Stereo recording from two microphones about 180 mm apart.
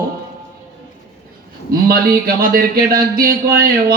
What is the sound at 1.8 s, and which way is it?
Speech, 55° right (ahead or behind).